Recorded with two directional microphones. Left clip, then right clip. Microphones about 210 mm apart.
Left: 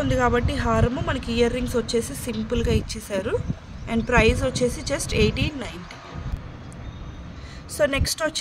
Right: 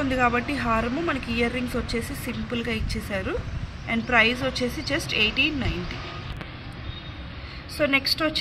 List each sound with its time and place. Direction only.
0.0 s speech: 55° left (ahead or behind)
7.7 s speech: 55° left (ahead or behind)